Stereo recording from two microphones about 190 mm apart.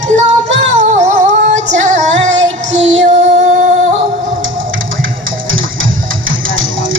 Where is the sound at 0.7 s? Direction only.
35° right (ahead or behind).